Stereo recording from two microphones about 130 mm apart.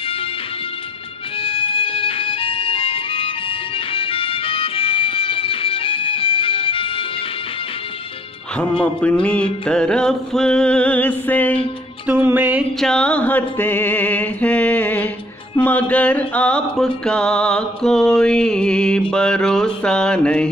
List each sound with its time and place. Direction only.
1.4 s music: 45° left (ahead or behind)
9.0 s music: 10° left (ahead or behind)
12.1 s music: 15° right (ahead or behind)
12.8 s music: 5° left (ahead or behind)